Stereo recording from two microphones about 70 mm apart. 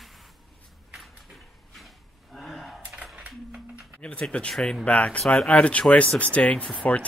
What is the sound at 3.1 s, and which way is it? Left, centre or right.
Music, centre.